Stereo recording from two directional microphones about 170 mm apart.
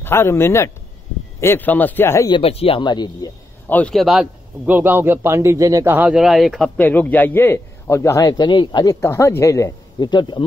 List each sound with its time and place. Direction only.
0.0 s a man's voice: 15° left (ahead or behind)
2.3 s speech: 35° left (ahead or behind)
3.6 s a man's voice: 10° left (ahead or behind); by 10.4 s 25° left (ahead or behind)